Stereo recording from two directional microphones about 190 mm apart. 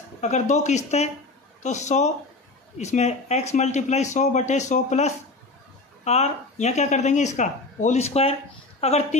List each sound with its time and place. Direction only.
0.2 s speech: 35° left (ahead or behind)